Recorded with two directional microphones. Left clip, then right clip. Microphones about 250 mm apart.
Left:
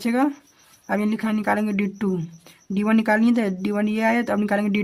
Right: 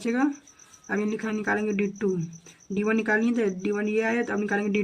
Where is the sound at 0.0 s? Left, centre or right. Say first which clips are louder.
Left 4 dB; left.